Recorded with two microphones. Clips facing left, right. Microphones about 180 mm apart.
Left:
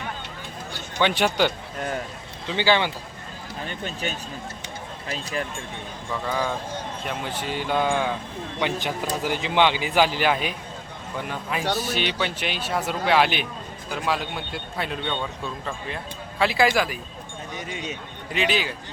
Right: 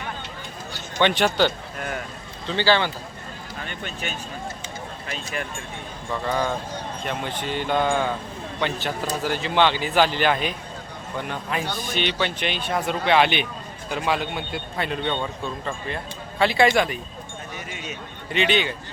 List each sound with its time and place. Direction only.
0.9 s speech: 5° left (ahead or behind)
3.7 s speech: 35° left (ahead or behind)
6.2 s speech: centre (ahead or behind)
18.3 s speech: 5° left (ahead or behind)